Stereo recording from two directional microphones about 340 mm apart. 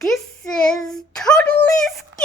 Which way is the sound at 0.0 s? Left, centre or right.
Centre.